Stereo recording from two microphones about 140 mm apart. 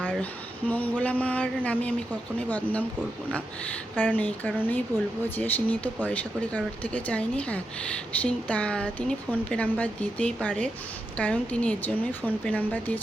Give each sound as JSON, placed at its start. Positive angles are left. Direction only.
{"t": 0.0, "sound": "a sound", "side_deg": 10}
{"t": 0.7, "sound": "a woman's voice", "side_deg": 10}
{"t": 3.9, "sound": "a woman's voice", "side_deg": 10}